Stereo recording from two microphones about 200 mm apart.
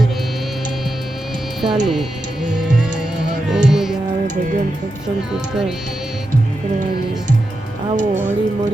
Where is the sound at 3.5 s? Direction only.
Centre (ahead or behind).